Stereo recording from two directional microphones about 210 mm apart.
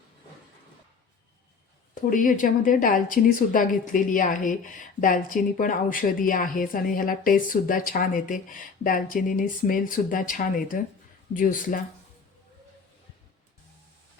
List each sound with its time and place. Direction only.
2.0 s speech: 40° left (ahead or behind)